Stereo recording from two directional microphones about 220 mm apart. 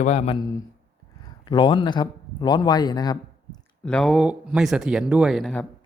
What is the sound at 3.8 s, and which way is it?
Speech, centre (ahead or behind).